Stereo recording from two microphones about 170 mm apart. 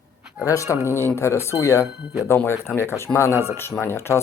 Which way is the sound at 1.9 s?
5° right (ahead or behind).